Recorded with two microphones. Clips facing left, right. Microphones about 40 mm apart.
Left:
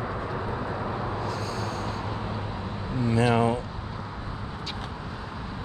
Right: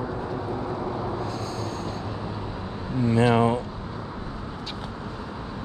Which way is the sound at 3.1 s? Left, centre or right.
Right.